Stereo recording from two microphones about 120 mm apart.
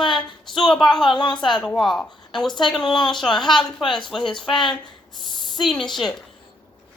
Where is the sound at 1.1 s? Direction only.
40° left (ahead or behind).